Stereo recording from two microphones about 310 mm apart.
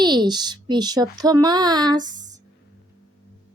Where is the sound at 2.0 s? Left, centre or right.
Right.